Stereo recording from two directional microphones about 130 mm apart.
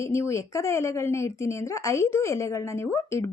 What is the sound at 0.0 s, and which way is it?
A woman's voice, 20° left (ahead or behind).